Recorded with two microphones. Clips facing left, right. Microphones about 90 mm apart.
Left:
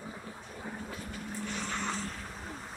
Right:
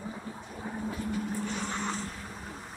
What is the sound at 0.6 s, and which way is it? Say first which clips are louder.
Vehicle: right 7 dB; 15° right (ahead or behind).